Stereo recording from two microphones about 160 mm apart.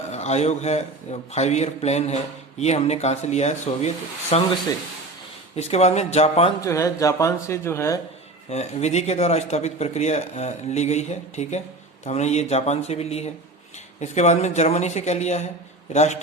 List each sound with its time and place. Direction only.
0.1 s a man's voice: 45° left (ahead or behind)
5.5 s a man's voice: 40° left (ahead or behind)
6.6 s speech: 20° left (ahead or behind)
8.4 s a man's voice: 45° left (ahead or behind)